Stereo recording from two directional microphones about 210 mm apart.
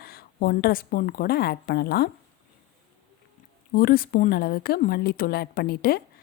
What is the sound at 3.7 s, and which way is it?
A woman's voice, 45° left (ahead or behind).